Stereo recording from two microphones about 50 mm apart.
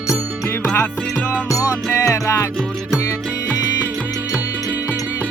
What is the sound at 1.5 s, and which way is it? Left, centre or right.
Music, left.